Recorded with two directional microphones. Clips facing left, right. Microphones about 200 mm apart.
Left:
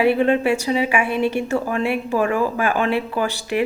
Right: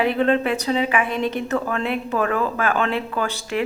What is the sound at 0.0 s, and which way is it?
Speech, 10° left (ahead or behind).